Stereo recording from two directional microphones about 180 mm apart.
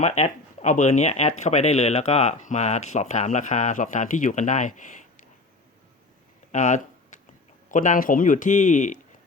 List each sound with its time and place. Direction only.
0.0 s speech: 40° left (ahead or behind)
6.5 s a sound: 40° left (ahead or behind)
7.7 s speech: 45° left (ahead or behind)